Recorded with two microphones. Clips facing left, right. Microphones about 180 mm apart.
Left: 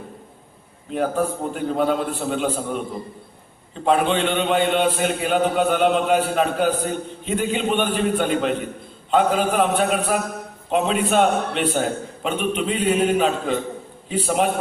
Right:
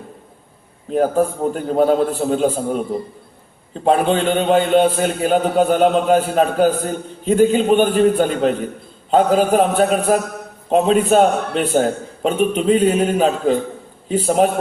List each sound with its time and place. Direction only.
0.9 s a man's voice: 40° right (ahead or behind)
3.8 s a man's voice: 45° right (ahead or behind)